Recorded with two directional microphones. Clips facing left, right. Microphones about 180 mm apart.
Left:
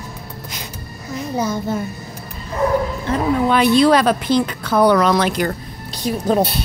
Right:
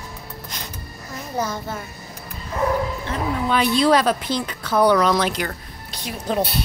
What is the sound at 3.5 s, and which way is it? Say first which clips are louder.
A woman's voice: left 4 dB; 60° left (ahead or behind).